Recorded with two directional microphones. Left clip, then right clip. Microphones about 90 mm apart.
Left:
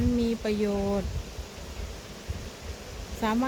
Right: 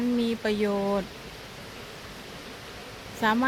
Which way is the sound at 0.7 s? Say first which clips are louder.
Right 2 dB; 10° right (ahead or behind).